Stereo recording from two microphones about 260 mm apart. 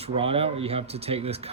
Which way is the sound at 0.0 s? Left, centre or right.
Right.